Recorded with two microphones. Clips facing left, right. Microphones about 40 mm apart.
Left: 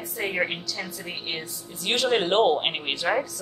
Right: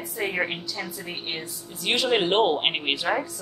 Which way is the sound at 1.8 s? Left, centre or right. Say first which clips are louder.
Even; centre.